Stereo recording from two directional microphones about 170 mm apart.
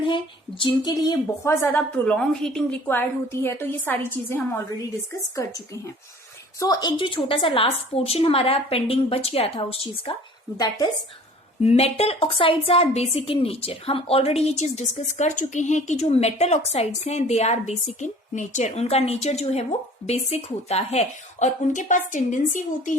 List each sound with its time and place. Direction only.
0.6 s speech: 25° left (ahead or behind)
1.6 s a woman's voice: 10° left (ahead or behind)
6.6 s a woman's voice: 20° left (ahead or behind)
11.6 s a woman's voice: 40° left (ahead or behind)